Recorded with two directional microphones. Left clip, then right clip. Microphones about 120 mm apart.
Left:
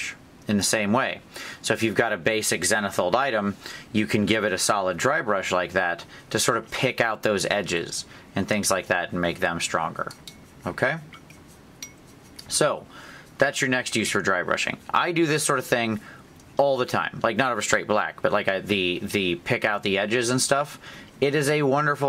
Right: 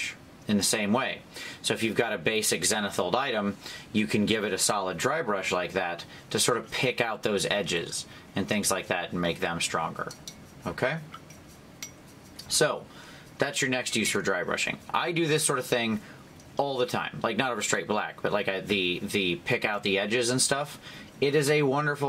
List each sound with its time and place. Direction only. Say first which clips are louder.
0.0 s speech: left 2 dB; 35° left (ahead or behind)
12.4 s speech: left 3 dB; 35° left (ahead or behind)